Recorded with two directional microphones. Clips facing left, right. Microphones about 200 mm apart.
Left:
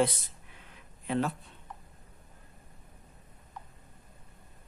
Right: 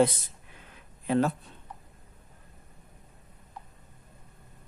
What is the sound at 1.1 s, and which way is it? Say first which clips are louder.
Speech: right 5 dB; 40° right (ahead or behind).